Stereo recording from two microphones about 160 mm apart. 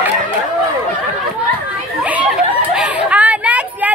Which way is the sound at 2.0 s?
10° right (ahead or behind).